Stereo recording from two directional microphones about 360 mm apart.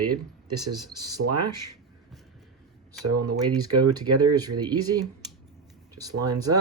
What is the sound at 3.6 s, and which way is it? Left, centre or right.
Speech, centre.